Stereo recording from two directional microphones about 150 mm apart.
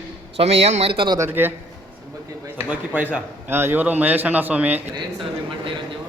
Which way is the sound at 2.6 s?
10° right (ahead or behind).